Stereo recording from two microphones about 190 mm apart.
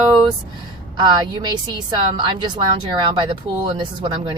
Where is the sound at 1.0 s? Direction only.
25° right (ahead or behind).